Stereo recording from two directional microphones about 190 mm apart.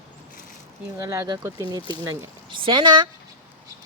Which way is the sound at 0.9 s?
15° right (ahead or behind).